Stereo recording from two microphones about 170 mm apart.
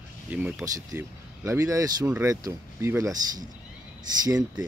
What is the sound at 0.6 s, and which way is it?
Speech, 20° right (ahead or behind).